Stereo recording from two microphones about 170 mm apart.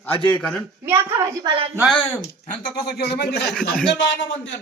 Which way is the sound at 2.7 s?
75° left (ahead or behind).